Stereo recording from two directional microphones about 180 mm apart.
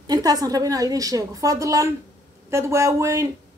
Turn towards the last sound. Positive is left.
turn(degrees=-15)  # may be behind; listen again after turning